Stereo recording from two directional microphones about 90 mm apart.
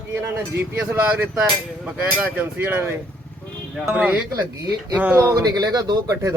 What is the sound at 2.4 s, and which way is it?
Speech, 20° right (ahead or behind).